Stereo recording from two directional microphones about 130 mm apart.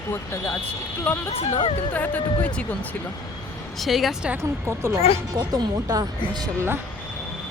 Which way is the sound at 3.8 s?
Centre (ahead or behind).